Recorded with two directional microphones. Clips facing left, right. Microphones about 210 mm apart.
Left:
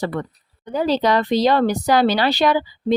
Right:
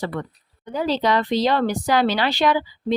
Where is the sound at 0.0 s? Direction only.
40° left (ahead or behind).